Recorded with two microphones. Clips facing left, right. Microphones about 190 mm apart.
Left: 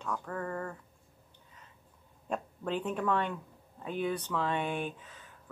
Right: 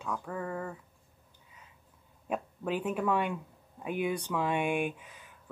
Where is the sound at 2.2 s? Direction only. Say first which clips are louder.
Right 1 dB; 5° right (ahead or behind).